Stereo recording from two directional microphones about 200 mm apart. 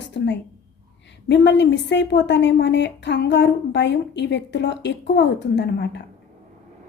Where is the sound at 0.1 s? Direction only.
60° left (ahead or behind).